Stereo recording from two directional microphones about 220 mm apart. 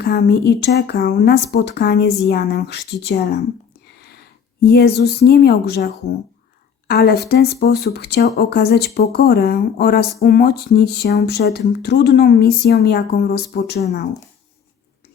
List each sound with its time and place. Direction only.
0.0 s a woman's voice: 45° left (ahead or behind)